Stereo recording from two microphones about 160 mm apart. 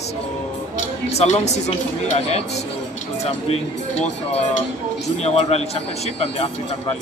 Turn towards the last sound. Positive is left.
turn(degrees=45)  # may be behind; listen again after turning